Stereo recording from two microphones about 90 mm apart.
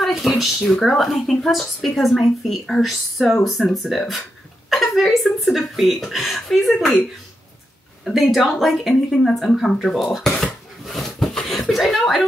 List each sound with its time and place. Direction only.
0.0 s a woman's voice: centre (ahead or behind)